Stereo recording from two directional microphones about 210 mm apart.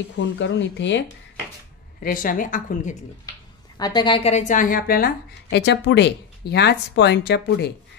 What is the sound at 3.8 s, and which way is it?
A woman's voice, 20° left (ahead or behind).